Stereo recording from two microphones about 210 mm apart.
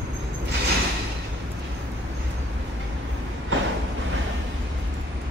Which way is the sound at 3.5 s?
65° right (ahead or behind).